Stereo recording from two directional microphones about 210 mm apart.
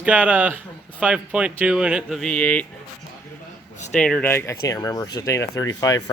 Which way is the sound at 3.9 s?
5° left (ahead or behind).